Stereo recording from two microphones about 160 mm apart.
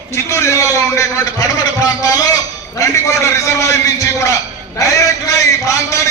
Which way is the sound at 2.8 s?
20° left (ahead or behind).